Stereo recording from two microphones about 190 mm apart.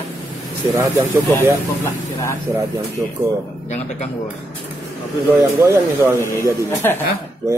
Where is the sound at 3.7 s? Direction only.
35° left (ahead or behind).